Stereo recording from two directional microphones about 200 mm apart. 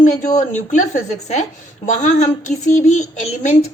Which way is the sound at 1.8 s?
40° left (ahead or behind).